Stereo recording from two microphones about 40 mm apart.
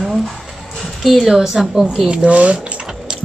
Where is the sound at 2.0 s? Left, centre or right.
Right.